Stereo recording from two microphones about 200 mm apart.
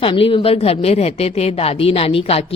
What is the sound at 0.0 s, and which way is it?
Speech, 25° left (ahead or behind).